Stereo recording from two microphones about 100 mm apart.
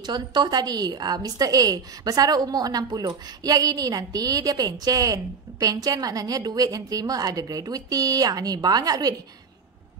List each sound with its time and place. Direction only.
0.0 s a woman's voice: 45° right (ahead or behind)